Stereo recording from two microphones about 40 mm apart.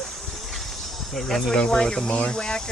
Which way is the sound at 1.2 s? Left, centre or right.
Centre.